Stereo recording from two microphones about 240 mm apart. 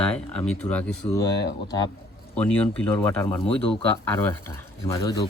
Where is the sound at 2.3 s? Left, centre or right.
Centre.